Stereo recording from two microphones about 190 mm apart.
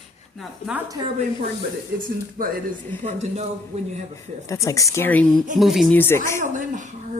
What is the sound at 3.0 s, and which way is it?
Speech, 35° right (ahead or behind).